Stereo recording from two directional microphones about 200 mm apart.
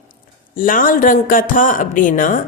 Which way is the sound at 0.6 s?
45° left (ahead or behind).